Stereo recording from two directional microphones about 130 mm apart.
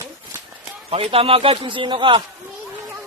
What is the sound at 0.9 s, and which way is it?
A man's voice, 50° right (ahead or behind).